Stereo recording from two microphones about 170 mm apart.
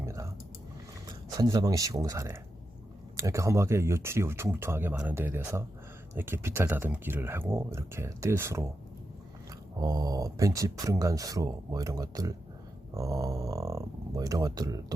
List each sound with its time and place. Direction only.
0.0 s typing: 15° right (ahead or behind)
1.0 s speech: 20° right (ahead or behind)
9.8 s speech: 20° right (ahead or behind)